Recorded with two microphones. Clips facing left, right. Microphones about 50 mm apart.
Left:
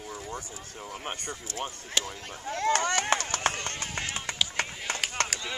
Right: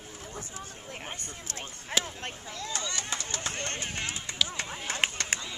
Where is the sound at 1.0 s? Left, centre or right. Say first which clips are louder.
Left 6 dB; left.